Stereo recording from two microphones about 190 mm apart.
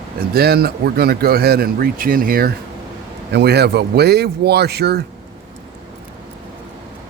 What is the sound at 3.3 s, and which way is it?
Speech, 60° right (ahead or behind).